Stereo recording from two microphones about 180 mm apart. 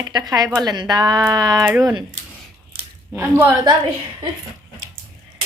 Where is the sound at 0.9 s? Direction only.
25° right (ahead or behind).